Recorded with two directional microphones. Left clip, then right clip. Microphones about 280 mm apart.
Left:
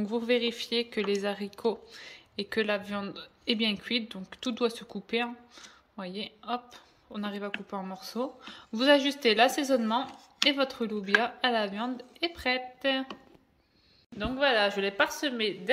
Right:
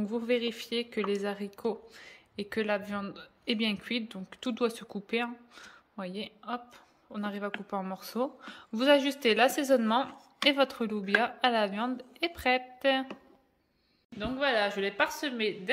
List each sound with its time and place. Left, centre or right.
0.0 s a woman's voice: centre
14.1 s a woman's voice: centre